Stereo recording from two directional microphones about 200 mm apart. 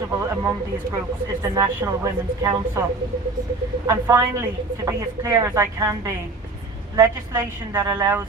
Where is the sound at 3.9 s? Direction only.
15° right (ahead or behind).